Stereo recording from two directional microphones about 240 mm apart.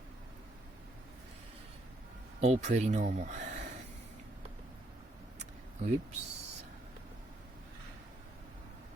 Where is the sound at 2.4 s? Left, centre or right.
Right.